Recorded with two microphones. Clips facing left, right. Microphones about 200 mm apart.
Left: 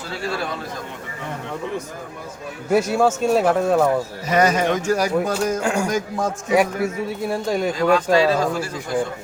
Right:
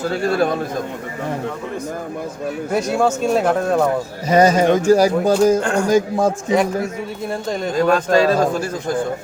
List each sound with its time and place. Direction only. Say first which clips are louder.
0.0 s a man's voice: right 9 dB; 45° right (ahead or behind)
2.7 s speech: left 1 dB; 5° left (ahead or behind)
4.3 s speech: right 5 dB; 30° right (ahead or behind)
5.5 s a man's voice: right 3 dB; 10° left (ahead or behind)
5.9 s a man's voice: right 7 dB; 30° right (ahead or behind)
6.5 s a man's voice: right 1 dB; 10° left (ahead or behind)
8.1 s a man's voice: right 3 dB; 45° right (ahead or behind)